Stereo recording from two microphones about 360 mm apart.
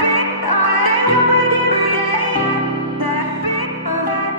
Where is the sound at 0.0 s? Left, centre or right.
Left.